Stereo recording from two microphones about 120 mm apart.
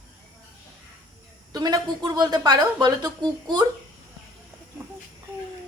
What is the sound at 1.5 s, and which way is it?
A woman's voice, 35° right (ahead or behind).